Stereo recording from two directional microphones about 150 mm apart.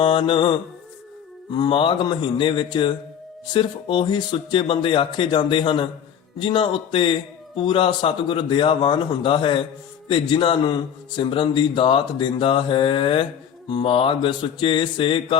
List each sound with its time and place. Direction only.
0.0 s a man's voice: 35° left (ahead or behind)